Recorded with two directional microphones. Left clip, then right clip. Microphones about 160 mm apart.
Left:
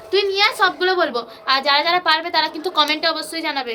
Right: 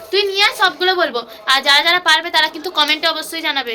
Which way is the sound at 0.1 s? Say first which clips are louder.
Right 2 dB; 5° left (ahead or behind).